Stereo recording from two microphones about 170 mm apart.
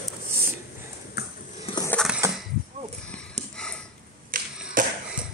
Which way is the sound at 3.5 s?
5° left (ahead or behind).